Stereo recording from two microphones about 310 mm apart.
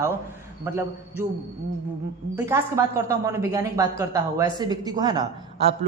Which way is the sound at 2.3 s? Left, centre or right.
Centre.